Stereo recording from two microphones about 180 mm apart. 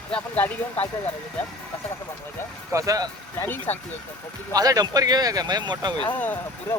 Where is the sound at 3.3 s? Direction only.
10° left (ahead or behind).